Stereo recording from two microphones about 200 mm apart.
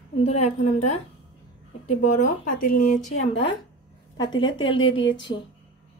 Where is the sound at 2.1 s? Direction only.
45° left (ahead or behind).